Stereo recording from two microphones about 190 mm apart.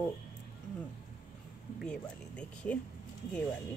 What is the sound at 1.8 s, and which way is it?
Speech, 5° left (ahead or behind).